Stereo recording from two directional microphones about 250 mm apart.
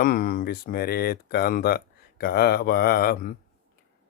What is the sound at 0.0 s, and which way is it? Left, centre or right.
Speech, left.